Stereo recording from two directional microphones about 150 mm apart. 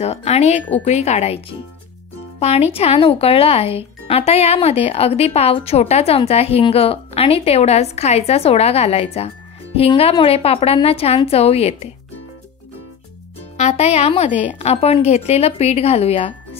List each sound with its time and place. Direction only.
0.0 s a woman's voice: 45° left (ahead or behind)
13.6 s speech: 45° left (ahead or behind)